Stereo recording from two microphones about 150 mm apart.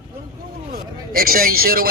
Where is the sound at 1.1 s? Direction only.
80° right.